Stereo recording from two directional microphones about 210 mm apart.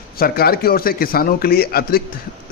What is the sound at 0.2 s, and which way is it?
A man's voice, 45° left (ahead or behind).